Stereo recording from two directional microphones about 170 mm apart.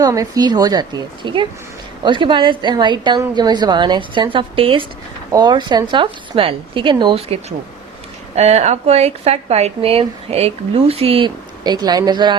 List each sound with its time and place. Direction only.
0.0 s a woman's voice: 20° right (ahead or behind)
8.4 s speech: 40° right (ahead or behind)